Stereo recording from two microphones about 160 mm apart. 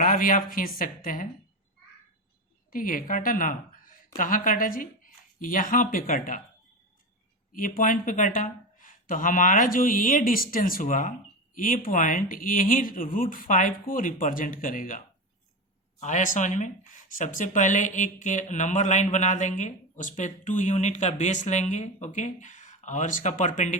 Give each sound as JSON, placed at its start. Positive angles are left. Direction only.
{"t": 0.0, "sound": "speech", "side_deg": 60}
{"t": 2.6, "sound": "a woman's voice", "side_deg": 60}
{"t": 7.5, "sound": "speech", "side_deg": 55}